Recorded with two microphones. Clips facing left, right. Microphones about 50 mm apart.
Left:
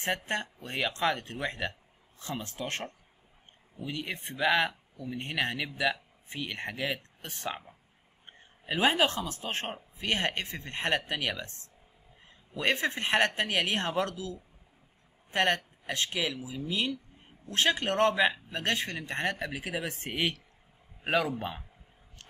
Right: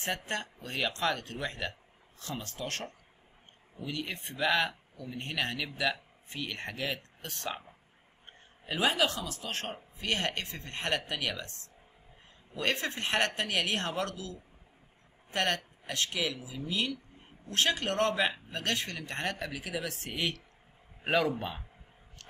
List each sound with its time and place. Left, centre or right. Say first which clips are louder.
0.0 s speech: left 3 dB; left
8.3 s speech: left 3 dB; left
21.0 s a man's voice: even; centre